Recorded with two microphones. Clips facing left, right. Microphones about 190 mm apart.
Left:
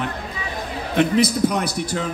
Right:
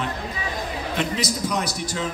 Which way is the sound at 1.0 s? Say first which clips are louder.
Left 10 dB; 55° left (ahead or behind).